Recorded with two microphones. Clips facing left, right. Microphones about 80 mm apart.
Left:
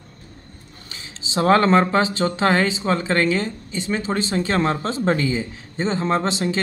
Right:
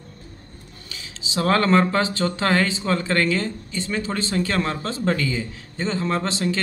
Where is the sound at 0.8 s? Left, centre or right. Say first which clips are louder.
Even; left.